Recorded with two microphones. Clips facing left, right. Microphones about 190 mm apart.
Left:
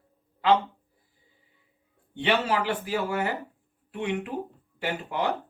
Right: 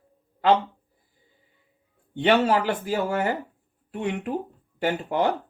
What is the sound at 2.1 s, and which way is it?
Speech, 45° right (ahead or behind).